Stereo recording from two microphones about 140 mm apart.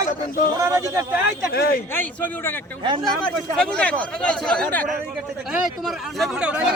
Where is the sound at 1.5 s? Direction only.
90° left.